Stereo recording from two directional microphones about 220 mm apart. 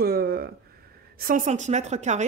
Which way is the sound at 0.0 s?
45° right (ahead or behind).